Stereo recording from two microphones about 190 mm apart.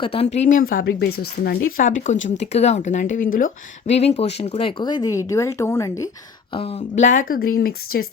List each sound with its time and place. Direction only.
0.0 s speech: 30° left (ahead or behind)
6.5 s speech: 30° left (ahead or behind); by 7.5 s 50° left (ahead or behind)